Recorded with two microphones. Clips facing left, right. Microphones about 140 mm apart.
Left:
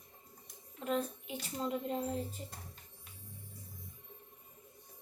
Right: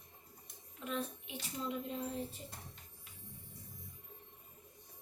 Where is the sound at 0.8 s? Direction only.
40° left (ahead or behind).